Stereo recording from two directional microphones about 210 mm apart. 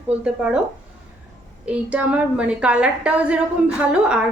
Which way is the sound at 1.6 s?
5° right (ahead or behind).